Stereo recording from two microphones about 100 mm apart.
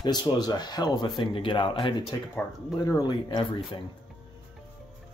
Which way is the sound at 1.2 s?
55° left (ahead or behind).